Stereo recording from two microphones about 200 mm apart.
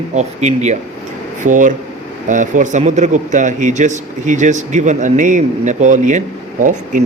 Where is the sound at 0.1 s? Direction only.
35° right (ahead or behind).